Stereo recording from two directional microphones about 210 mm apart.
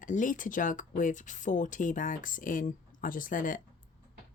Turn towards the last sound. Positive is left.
turn(degrees=40)  # may be behind; listen again after turning